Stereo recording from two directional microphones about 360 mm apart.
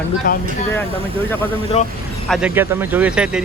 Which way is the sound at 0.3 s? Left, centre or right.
Left.